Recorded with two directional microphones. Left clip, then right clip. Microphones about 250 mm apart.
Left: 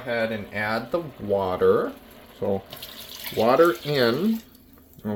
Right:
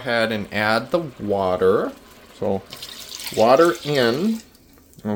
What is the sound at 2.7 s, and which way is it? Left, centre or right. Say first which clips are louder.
Speech: right 4 dB; centre.